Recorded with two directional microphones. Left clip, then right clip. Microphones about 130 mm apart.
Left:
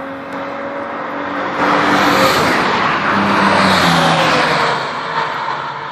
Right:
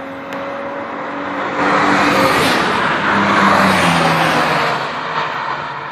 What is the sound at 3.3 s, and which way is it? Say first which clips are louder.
Vehicle: right 2 dB; 40° left (ahead or behind).